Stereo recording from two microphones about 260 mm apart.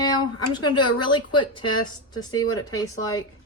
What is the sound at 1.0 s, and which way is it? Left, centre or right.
A woman's voice, centre.